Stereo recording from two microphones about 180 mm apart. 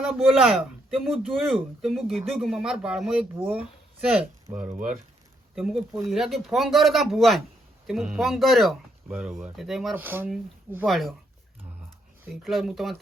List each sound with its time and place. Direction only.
0.0 s speech: 5° right (ahead or behind)
4.5 s speech: 45° right (ahead or behind)
5.5 s speech: 5° right (ahead or behind)
10.8 s speech: centre (ahead or behind)
12.4 s speech: centre (ahead or behind)